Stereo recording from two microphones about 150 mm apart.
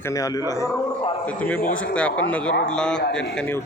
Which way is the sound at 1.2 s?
10° left (ahead or behind).